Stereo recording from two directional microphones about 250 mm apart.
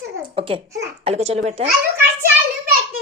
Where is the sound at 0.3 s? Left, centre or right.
Right.